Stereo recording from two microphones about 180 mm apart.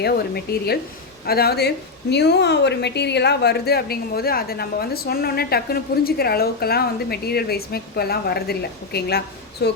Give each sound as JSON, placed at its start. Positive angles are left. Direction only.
{"t": 0.0, "sound": "a woman's voice", "side_deg": 60}